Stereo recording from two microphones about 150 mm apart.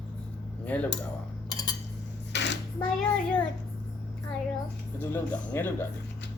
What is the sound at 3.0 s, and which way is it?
Speech, 10° left (ahead or behind).